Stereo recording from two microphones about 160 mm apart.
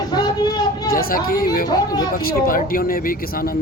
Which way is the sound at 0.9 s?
65° left (ahead or behind).